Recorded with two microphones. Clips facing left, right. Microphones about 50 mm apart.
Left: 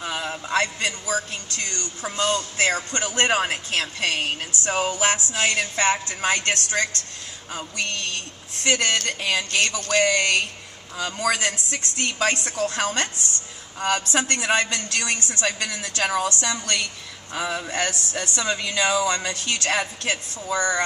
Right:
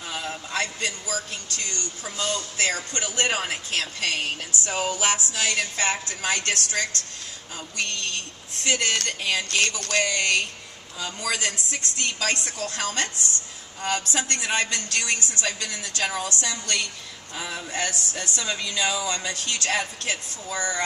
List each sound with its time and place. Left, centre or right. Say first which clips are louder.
0.5 s a woman's voice: left 5 dB; left
8.8 s speech: left 2 dB; centre
10.0 s a woman's voice: left 3 dB; left